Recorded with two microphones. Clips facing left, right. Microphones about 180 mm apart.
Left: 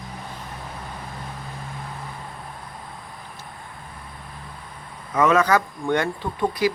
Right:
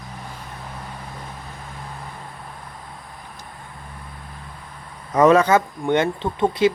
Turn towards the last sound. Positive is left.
turn(degrees=-25)  # may be behind; listen again after turning